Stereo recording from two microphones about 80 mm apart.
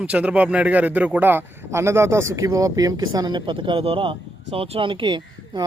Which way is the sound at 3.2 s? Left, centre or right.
Right.